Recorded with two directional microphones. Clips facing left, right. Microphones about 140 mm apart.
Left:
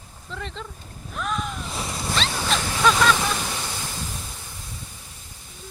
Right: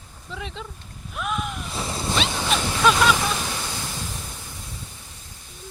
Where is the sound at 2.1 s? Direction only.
5° right (ahead or behind).